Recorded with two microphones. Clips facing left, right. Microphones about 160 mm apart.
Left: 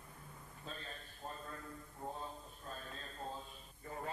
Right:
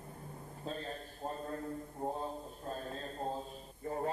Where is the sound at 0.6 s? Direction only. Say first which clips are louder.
Right 9 dB; 35° right (ahead or behind).